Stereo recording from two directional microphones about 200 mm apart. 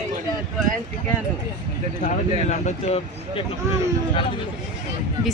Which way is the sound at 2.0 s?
35° left (ahead or behind).